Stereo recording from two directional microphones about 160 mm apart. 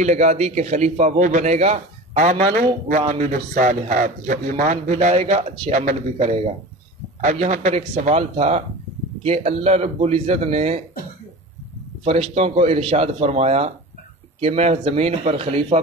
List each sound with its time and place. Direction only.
0.0 s a man's voice: 45° right (ahead or behind)
12.0 s speech: 40° right (ahead or behind)